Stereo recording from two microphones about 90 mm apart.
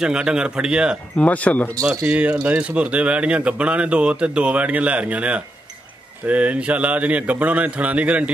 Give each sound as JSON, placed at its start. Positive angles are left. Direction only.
{"t": 0.0, "sound": "speech", "side_deg": -10}
{"t": 1.2, "sound": "speech", "side_deg": 15}
{"t": 1.8, "sound": "speech", "side_deg": -40}
{"t": 2.0, "sound": "speech", "side_deg": -15}